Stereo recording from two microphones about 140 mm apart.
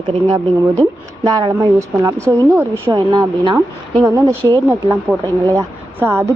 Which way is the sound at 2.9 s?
30° right (ahead or behind).